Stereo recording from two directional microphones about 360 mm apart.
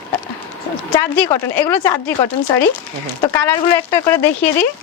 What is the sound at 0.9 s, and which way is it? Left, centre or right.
Speech, centre.